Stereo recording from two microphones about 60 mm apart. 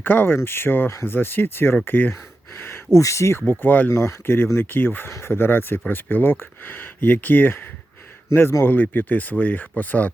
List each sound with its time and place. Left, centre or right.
0.0 s speech: left
3.0 s speech: left
3.4 s speech: left
3.9 s speech: left